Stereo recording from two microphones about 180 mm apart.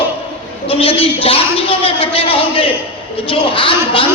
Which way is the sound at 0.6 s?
30° left (ahead or behind).